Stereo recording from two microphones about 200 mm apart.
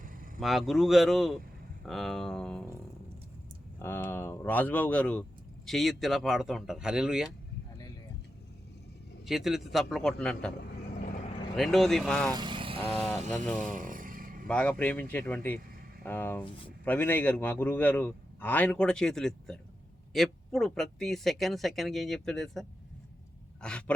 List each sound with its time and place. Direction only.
0.3 s speech: centre (ahead or behind)
3.8 s a man's voice: 10° left (ahead or behind)
9.2 s speech: centre (ahead or behind)
10.9 s vehicle: 35° left (ahead or behind)
11.5 s speech: centre (ahead or behind)
12.3 s vehicle: 25° right (ahead or behind)
12.9 s speech: 5° left (ahead or behind)
13.1 s speech: 35° right (ahead or behind)
13.4 s a man's voice: 5° left (ahead or behind)
13.7 s vehicle: 45° right (ahead or behind)
14.4 s a man's voice: 5° left (ahead or behind)